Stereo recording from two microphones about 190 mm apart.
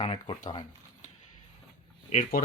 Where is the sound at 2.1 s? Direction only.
45° left (ahead or behind).